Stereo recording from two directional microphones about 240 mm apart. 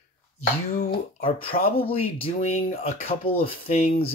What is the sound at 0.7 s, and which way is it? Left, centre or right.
Speech, left.